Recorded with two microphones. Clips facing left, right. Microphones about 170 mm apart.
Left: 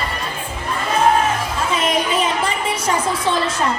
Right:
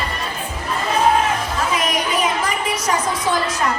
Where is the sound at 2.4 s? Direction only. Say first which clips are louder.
Left 1 dB; 30° left (ahead or behind).